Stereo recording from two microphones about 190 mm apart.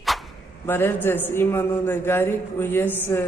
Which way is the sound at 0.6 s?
10° left (ahead or behind).